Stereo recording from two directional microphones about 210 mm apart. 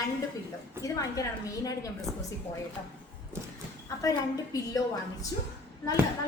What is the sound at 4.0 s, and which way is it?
Speech, 15° left (ahead or behind).